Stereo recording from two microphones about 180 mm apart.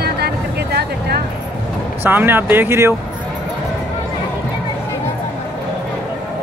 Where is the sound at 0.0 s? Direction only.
65° right (ahead or behind).